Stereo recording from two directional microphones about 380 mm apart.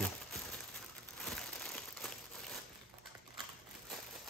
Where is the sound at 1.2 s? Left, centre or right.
Centre.